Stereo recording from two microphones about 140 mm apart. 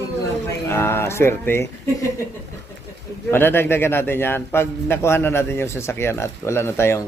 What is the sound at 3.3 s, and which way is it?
A man's voice, 15° left (ahead or behind).